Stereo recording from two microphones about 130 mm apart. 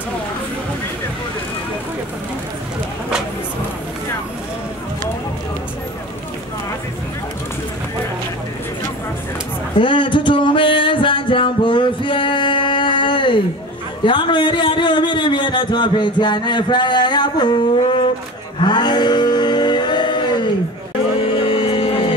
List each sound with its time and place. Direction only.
9.8 s music: 40° left (ahead or behind)
14.0 s a sound: 40° left (ahead or behind)
21.2 s music: 40° left (ahead or behind)